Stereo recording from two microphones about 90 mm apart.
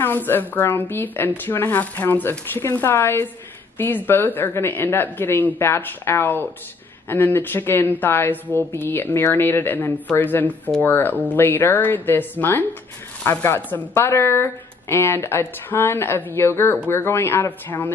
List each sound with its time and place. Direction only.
0.0 s a woman's voice: 25° left (ahead or behind)